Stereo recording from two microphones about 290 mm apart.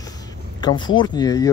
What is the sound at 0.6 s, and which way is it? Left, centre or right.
Speech, centre.